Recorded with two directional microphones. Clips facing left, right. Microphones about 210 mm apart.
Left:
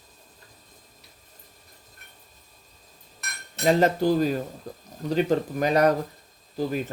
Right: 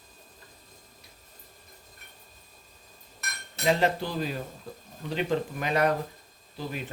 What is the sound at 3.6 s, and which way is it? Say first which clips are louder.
Speech: left 5 dB; 45° left (ahead or behind).